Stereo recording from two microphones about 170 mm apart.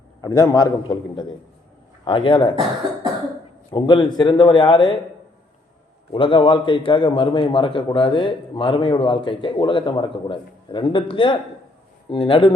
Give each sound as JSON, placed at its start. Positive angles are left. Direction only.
{"t": 0.2, "sound": "a man's voice", "side_deg": 20}
{"t": 3.7, "sound": "a man's voice", "side_deg": 25}
{"t": 6.1, "sound": "a man's voice", "side_deg": 30}